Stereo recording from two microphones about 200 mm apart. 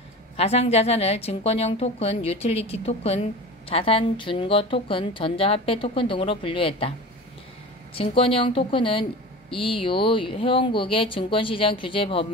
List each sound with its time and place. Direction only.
0.4 s a woman's voice: 30° left (ahead or behind)
7.9 s a woman's voice: 30° left (ahead or behind)